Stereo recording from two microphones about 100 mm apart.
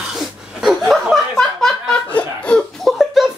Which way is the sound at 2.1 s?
10° left (ahead or behind).